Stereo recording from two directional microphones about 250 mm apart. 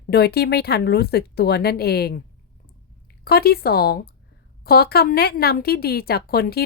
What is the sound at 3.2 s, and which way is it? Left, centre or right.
Speech, left.